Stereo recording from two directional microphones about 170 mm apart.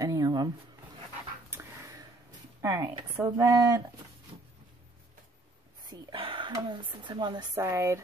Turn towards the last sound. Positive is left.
turn(degrees=-15)  # may be behind; listen again after turning